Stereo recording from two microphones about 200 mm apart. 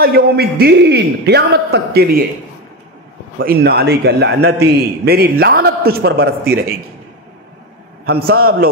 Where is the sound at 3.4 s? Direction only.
50° right (ahead or behind).